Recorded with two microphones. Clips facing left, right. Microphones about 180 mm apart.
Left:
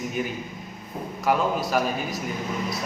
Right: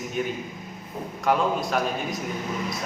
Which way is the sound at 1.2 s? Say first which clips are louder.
Even; 5° left (ahead or behind).